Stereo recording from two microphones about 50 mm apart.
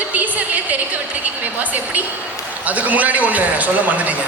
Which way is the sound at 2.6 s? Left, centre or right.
Right.